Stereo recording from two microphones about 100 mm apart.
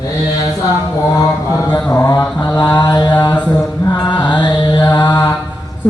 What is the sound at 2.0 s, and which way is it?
Mantra, 35° left (ahead or behind).